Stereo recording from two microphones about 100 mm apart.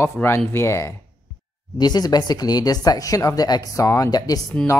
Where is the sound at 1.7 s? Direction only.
45° left (ahead or behind).